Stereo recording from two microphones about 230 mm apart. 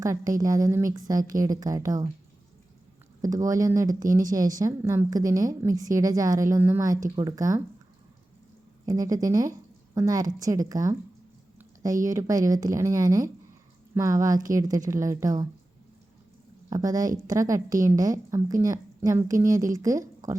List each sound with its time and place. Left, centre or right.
0.0 s speech: centre
3.2 s speech: centre
8.9 s speech: centre
12.0 s speech: centre
16.6 s speech: centre